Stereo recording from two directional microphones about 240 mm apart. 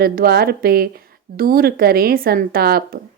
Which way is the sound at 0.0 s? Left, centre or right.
Right.